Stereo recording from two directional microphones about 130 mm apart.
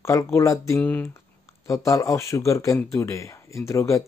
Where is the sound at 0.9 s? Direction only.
10° left (ahead or behind).